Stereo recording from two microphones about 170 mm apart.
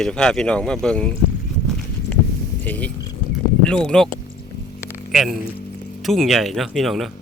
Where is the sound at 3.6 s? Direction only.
5° left (ahead or behind).